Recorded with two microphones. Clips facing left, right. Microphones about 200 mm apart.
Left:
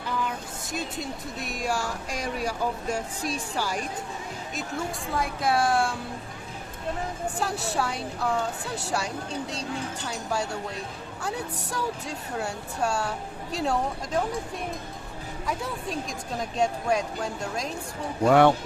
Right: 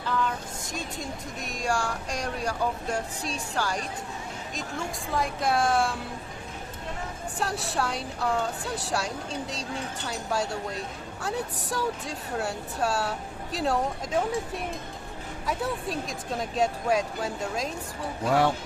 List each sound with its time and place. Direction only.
0.1 s vehicle: 10° left (ahead or behind)
1.5 s a sound: 5° left (ahead or behind)
5.1 s speech: centre (ahead or behind)
7.3 s speech: centre (ahead or behind)
15.4 s speech: centre (ahead or behind)
18.3 s speech: 65° left (ahead or behind)